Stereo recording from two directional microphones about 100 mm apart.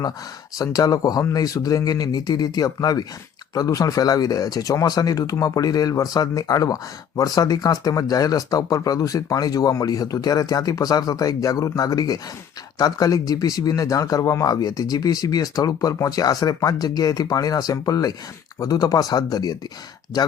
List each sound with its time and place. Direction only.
0.6 s speech: 40° left (ahead or behind)